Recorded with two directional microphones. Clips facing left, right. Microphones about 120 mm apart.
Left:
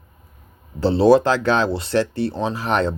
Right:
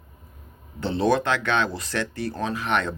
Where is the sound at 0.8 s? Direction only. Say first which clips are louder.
Left 8 dB; 30° left (ahead or behind).